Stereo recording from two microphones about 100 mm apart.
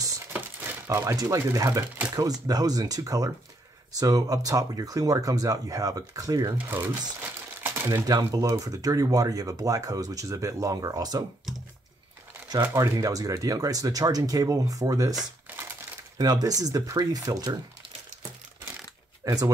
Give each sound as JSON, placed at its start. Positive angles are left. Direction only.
{"t": 0.3, "sound": "a sound", "side_deg": -20}
{"t": 0.9, "sound": "speech", "side_deg": -30}
{"t": 6.7, "sound": "crumpling", "side_deg": -25}
{"t": 8.2, "sound": "speech", "side_deg": -35}
{"t": 12.7, "sound": "speech", "side_deg": -35}
{"t": 15.5, "sound": "crushing", "side_deg": -20}
{"t": 16.2, "sound": "speech", "side_deg": -40}
{"t": 19.2, "sound": "speech", "side_deg": -40}